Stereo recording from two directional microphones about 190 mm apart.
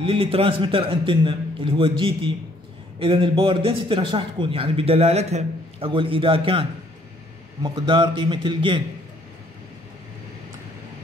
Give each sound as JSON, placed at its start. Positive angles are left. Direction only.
{"t": 0.0, "sound": "a man's voice", "side_deg": -30}